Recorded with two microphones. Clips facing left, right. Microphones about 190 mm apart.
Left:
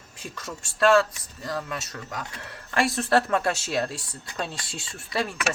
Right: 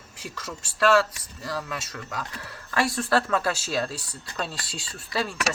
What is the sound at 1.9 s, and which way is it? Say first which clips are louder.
Speech: right 1 dB; 20° left (ahead or behind).